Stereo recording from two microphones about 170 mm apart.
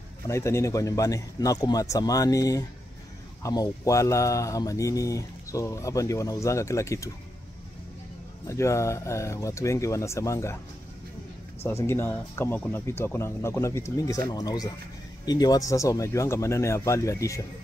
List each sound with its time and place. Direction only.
0.3 s speech: 15° left (ahead or behind)
8.5 s speech: 15° left (ahead or behind)
11.6 s speech: 15° left (ahead or behind)